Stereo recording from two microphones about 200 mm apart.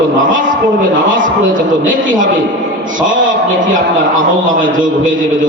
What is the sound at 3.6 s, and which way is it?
A man's voice, 40° right (ahead or behind).